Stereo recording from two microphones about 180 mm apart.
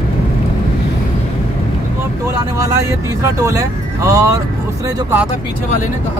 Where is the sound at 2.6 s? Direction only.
20° right (ahead or behind).